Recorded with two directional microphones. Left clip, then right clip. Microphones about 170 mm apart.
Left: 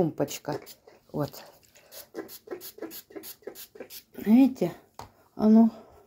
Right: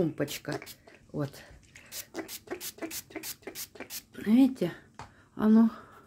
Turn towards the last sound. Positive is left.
turn(degrees=-5)  # may be behind; listen again after turning